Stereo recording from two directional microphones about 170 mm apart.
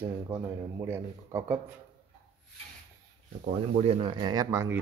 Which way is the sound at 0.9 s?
15° right (ahead or behind).